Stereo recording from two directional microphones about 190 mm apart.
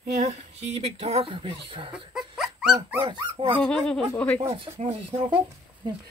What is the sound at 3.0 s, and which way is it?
Speech, 25° right (ahead or behind).